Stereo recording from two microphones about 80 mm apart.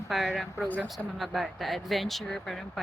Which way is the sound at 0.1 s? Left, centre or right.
Centre.